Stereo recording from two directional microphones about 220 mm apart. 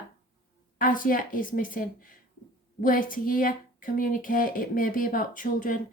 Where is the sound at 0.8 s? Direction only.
40° left (ahead or behind).